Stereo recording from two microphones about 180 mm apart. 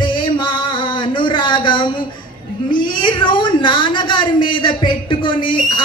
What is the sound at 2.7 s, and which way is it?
Speech, 25° left (ahead or behind).